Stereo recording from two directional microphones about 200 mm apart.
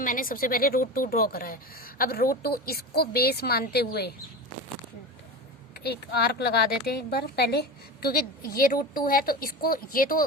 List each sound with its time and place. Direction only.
0.0 s a woman's voice: 45° left (ahead or behind)
5.8 s a woman's voice: 55° left (ahead or behind)